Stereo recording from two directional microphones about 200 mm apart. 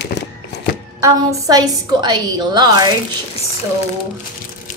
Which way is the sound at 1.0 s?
15° right (ahead or behind).